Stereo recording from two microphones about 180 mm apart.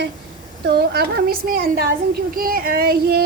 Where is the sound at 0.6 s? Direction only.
55° right (ahead or behind).